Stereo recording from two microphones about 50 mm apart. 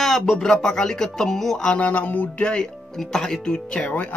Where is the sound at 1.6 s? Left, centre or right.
Left; by 3.3 s centre.